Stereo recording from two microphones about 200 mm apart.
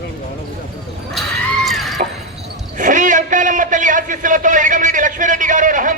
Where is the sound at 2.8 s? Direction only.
40° right (ahead or behind).